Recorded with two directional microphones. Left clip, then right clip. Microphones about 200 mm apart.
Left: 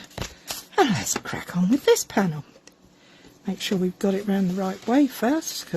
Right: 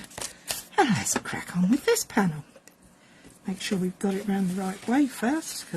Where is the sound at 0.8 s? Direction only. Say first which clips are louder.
Left 2 dB; 50° left (ahead or behind).